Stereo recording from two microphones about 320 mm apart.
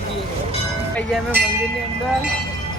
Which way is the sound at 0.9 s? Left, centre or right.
Centre.